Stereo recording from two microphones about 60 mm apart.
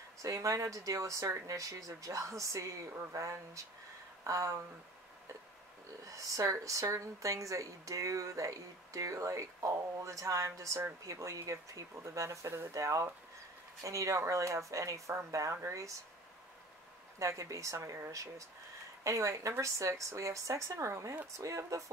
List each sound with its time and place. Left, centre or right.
0.2 s a woman's voice: right
6.0 s a woman's voice: right
17.2 s a woman's voice: right